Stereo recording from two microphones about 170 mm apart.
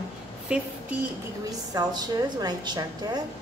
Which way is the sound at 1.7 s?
25° right (ahead or behind).